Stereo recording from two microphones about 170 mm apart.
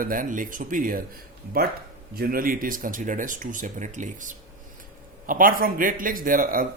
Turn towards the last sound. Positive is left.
turn(degrees=-55)  # may be behind; listen again after turning